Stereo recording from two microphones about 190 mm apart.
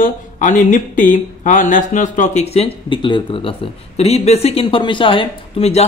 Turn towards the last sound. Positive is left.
turn(degrees=30)  # may be behind; listen again after turning